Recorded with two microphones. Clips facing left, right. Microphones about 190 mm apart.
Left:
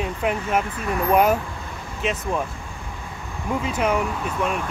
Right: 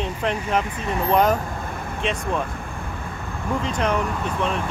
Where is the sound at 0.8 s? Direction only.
25° right (ahead or behind).